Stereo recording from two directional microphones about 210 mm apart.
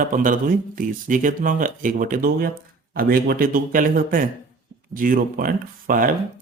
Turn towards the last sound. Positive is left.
turn(degrees=-40)  # may be behind; listen again after turning